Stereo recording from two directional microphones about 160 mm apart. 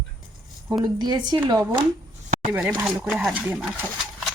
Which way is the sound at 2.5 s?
10° right (ahead or behind).